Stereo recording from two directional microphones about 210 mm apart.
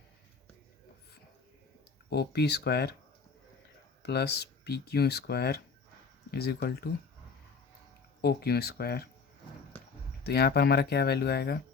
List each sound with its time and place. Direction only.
2.0 s speech: 50° left (ahead or behind)
4.0 s speech: 50° left (ahead or behind)
8.2 s speech: 50° left (ahead or behind)
10.2 s speech: 50° left (ahead or behind)